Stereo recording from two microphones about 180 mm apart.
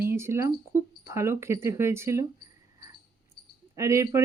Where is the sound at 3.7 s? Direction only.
15° right (ahead or behind).